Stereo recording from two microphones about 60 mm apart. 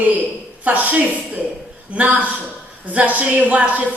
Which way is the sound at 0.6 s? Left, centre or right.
Right.